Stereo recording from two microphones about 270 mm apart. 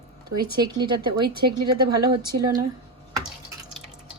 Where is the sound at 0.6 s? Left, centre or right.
Centre.